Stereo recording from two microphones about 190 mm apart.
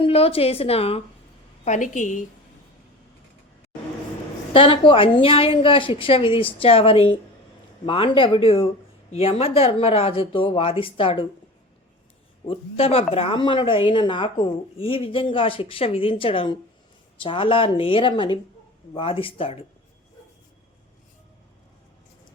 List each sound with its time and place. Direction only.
0.0 s a woman's voice: 30° left (ahead or behind)
4.5 s a woman's voice: 25° left (ahead or behind)
12.5 s a woman's voice: 30° left (ahead or behind)